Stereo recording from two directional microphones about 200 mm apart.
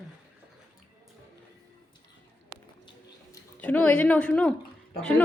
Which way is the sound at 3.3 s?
5° left (ahead or behind).